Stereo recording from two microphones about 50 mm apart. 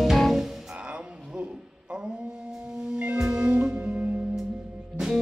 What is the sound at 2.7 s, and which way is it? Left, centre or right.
Music, right.